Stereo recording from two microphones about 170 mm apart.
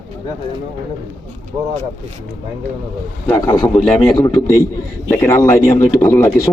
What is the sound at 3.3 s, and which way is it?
A man's voice, 15° left (ahead or behind).